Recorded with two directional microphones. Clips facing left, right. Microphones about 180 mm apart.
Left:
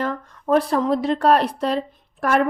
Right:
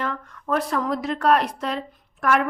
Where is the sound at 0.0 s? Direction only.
35° left (ahead or behind).